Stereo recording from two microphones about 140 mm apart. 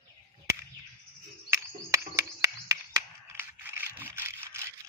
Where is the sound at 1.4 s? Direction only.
20° right (ahead or behind).